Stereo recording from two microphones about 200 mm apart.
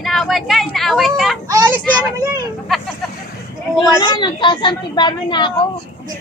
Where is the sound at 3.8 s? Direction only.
20° left (ahead or behind).